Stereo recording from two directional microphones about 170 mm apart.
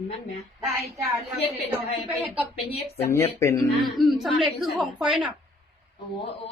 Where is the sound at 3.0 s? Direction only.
15° left (ahead or behind).